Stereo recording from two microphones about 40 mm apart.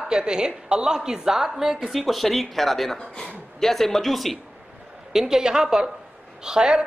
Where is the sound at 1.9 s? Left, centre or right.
Centre.